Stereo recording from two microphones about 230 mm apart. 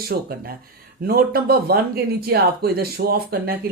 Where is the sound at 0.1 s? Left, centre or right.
Right.